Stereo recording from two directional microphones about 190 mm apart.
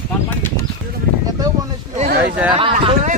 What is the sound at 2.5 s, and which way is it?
Speech, 30° right (ahead or behind).